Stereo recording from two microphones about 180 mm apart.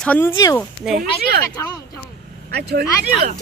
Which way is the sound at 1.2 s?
55° right (ahead or behind).